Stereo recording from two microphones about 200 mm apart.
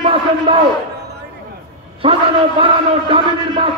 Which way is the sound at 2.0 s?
25° right (ahead or behind).